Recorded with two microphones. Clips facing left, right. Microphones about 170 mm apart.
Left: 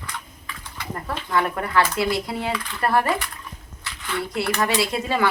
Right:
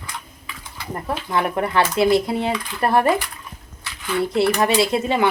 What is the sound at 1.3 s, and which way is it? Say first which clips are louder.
Speech: right 1 dB; 20° right (ahead or behind).